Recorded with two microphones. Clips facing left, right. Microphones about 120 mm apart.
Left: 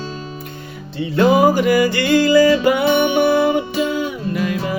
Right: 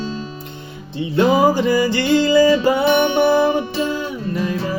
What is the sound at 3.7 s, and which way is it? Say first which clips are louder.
Music: left 2 dB; 5° left (ahead or behind).